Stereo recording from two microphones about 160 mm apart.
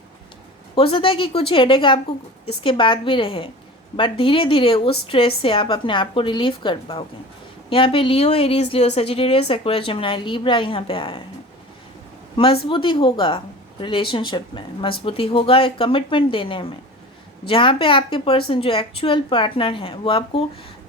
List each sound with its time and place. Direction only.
0.8 s a woman's voice: 35° left (ahead or behind)
12.6 s a woman's voice: 30° left (ahead or behind)